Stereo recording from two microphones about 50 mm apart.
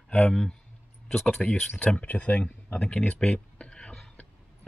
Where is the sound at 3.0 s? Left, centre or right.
Centre.